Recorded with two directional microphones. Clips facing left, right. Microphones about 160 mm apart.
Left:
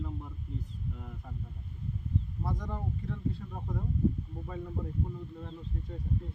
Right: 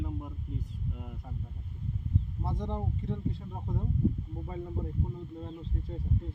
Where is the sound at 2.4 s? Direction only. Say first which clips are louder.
Right 4 dB; 25° right (ahead or behind).